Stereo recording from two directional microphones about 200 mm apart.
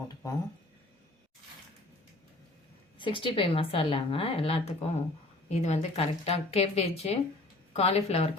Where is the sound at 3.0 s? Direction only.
25° left (ahead or behind).